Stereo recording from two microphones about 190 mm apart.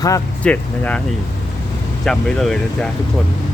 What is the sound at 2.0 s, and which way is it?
Speech, centre (ahead or behind).